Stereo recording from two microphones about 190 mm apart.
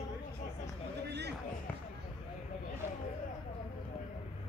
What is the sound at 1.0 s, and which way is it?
Basketball bounce, 60° right (ahead or behind).